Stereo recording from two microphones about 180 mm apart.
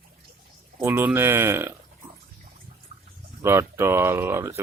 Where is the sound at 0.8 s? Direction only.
10° right (ahead or behind).